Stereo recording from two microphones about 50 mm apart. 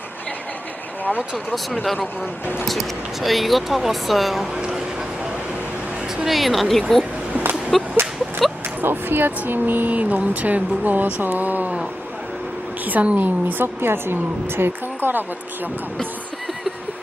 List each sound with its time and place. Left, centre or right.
1.7 s speech: centre
6.2 s speech: centre
8.8 s speech: right
12.8 s a sound: right
13.1 s a woman's voice: right